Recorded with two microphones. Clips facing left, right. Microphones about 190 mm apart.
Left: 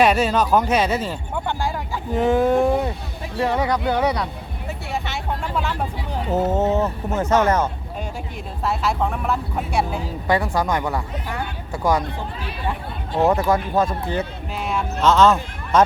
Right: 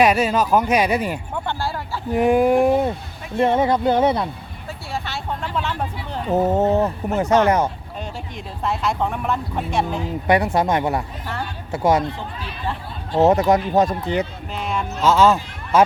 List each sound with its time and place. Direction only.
0.0 s speech: 10° right (ahead or behind)
1.5 s speech: 10° left (ahead or behind)
2.1 s speech: 15° right (ahead or behind)
4.9 s a sound: 20° left (ahead or behind)
6.3 s speech: 15° right (ahead or behind)
8.6 s speech: 5° left (ahead or behind)
10.0 s speech: 20° right (ahead or behind)
13.1 s speech: 20° right (ahead or behind)
14.5 s music: 5° left (ahead or behind)
15.0 s speech: 10° right (ahead or behind)